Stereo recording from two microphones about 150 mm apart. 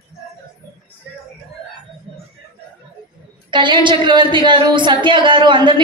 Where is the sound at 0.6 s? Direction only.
15° left (ahead or behind).